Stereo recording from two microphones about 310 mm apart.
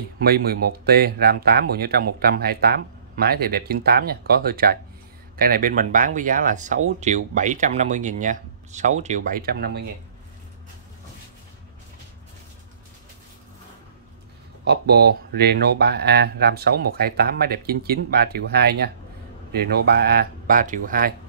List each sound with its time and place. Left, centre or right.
0.2 s speech: right
14.7 s speech: right